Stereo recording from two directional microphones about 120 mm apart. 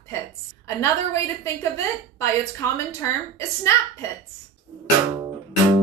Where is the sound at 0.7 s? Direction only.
25° left (ahead or behind).